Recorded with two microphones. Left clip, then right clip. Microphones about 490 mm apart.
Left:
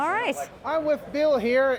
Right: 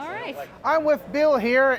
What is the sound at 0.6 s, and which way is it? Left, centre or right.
A man's voice, right.